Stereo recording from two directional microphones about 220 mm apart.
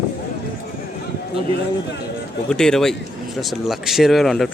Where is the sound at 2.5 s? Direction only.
5° left (ahead or behind).